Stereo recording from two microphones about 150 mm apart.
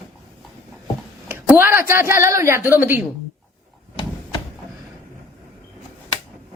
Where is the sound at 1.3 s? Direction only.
15° right (ahead or behind).